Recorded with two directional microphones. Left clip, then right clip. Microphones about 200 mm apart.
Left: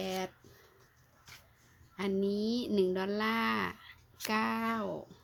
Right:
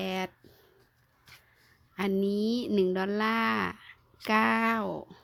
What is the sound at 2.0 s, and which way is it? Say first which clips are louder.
A woman's voice: right 4 dB; 35° right (ahead or behind).